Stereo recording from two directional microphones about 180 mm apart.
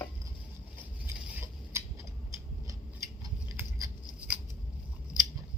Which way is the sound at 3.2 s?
15° right (ahead or behind).